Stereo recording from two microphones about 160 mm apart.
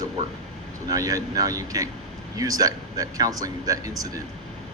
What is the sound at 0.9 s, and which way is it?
Speech, 20° right (ahead or behind).